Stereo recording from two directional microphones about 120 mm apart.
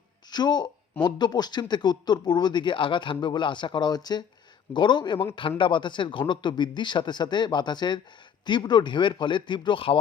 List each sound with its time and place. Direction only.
0.3 s a man's voice: 35° left (ahead or behind)